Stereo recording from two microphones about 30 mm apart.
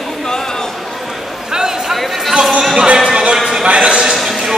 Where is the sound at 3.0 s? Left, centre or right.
Right.